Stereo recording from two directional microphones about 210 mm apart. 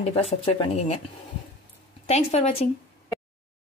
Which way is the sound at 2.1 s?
30° left (ahead or behind).